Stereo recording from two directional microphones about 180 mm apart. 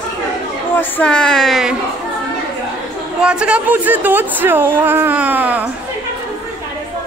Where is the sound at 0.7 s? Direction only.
10° left (ahead or behind).